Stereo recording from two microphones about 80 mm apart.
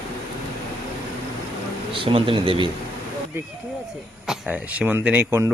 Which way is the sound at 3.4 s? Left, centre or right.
Right.